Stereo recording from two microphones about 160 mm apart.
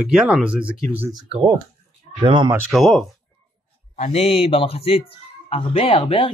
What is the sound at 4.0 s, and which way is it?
Speech, 40° left (ahead or behind).